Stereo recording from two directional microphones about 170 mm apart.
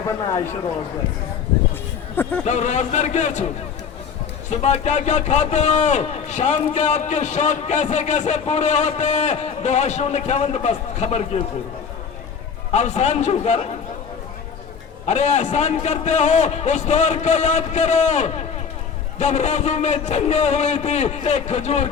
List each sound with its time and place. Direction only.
0.1 s speech: 15° left (ahead or behind)
2.4 s a man's voice: 45° left (ahead or behind)
4.4 s a man's voice: 40° left (ahead or behind)
12.7 s a man's voice: 40° left (ahead or behind)
15.0 s a man's voice: 40° left (ahead or behind)